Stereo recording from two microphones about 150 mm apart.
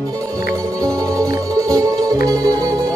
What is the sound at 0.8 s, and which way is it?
Music, 25° right (ahead or behind).